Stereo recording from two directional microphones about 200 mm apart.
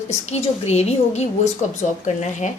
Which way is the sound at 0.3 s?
35° left (ahead or behind).